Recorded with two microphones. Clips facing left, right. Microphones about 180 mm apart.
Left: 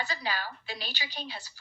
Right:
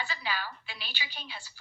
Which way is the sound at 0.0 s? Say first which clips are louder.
Left 2 dB; 40° left (ahead or behind).